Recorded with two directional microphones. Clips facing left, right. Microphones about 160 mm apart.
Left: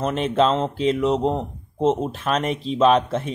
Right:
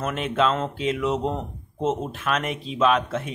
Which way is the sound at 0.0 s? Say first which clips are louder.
Left 4 dB; 35° left (ahead or behind).